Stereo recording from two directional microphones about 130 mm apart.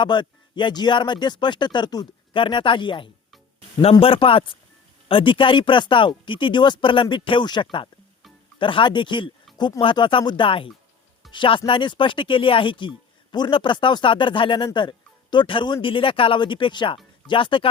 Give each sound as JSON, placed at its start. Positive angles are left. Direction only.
{"t": 0.0, "sound": "a man's voice", "side_deg": 35}